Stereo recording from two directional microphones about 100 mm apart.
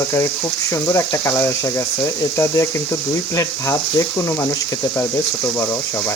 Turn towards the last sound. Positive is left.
turn(degrees=20)  # may be behind; listen again after turning